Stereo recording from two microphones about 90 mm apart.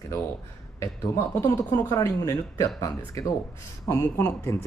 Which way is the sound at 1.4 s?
30° left (ahead or behind).